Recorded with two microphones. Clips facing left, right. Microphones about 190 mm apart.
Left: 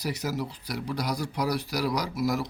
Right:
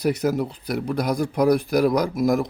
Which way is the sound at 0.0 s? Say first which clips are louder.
Right 9 dB; 55° right (ahead or behind).